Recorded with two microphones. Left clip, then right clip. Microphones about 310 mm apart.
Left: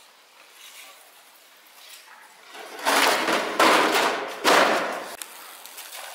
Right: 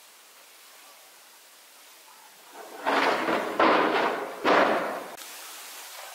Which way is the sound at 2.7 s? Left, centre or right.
Centre.